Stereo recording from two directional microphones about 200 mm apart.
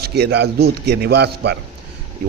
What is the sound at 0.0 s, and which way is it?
A man's voice, 55° right (ahead or behind).